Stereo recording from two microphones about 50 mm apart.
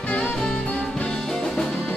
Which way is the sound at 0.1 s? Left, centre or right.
Left.